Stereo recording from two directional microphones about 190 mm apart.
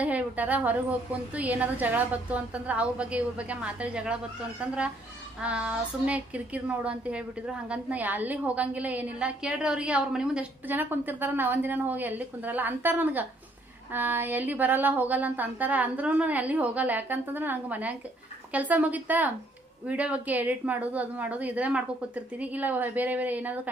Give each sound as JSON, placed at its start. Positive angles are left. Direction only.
{"t": 0.0, "sound": "a woman's voice", "side_deg": -10}
{"t": 5.4, "sound": "a woman's voice", "side_deg": -5}